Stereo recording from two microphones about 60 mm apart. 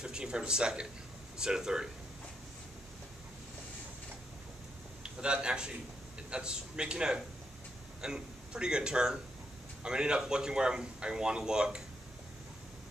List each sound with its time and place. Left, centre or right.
0.0 s speech: centre
5.2 s a man's voice: centre